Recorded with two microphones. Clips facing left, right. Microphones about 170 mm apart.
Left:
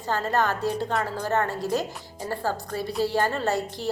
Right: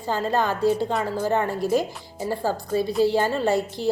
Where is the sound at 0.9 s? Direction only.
Centre (ahead or behind).